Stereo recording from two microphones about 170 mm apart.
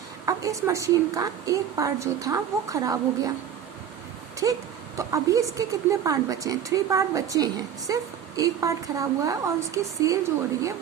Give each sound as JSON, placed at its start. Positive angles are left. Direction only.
{"t": 0.3, "sound": "a woman's voice", "side_deg": -20}
{"t": 4.4, "sound": "a woman's voice", "side_deg": -20}